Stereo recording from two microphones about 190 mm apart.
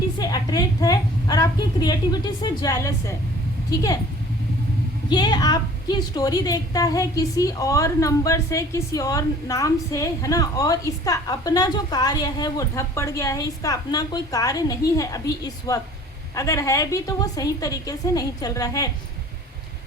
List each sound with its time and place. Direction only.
0.2 s a woman's voice: 20° left (ahead or behind)
5.0 s a woman's voice: 25° left (ahead or behind)